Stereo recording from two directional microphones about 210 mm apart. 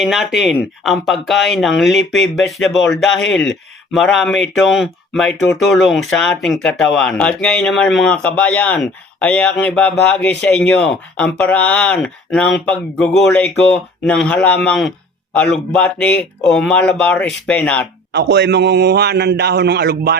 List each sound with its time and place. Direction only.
0.0 s speech: centre (ahead or behind)
3.2 s speech: 60° left (ahead or behind)
3.4 s speech: centre (ahead or behind)
18.1 s a man's voice: 55° right (ahead or behind)